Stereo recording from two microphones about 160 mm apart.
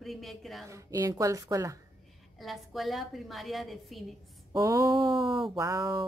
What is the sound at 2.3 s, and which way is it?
A woman's voice, centre (ahead or behind).